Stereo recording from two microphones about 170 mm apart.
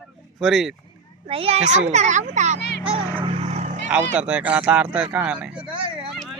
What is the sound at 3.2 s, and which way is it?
Vehicle, 35° right (ahead or behind).